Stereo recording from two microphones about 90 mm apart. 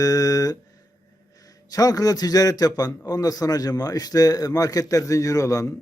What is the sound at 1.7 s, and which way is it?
A man's voice, 45° left (ahead or behind).